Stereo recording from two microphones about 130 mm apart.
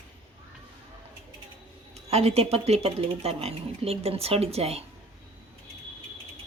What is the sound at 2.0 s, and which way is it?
Speech, 55° right (ahead or behind).